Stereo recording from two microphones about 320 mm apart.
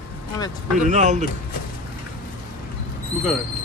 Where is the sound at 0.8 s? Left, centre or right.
Right.